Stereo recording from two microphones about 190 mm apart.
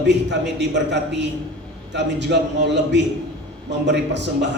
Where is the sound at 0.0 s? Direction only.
65° right (ahead or behind).